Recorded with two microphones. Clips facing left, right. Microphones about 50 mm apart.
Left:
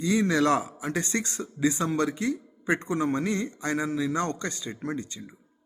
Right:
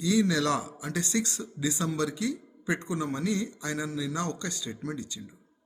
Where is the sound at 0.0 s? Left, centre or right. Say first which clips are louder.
Left 2 dB; left.